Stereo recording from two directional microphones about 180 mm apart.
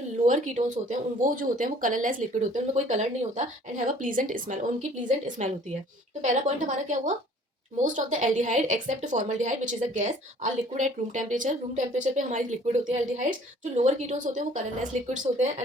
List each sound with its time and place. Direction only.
0.3 s a woman's voice: 45° right (ahead or behind)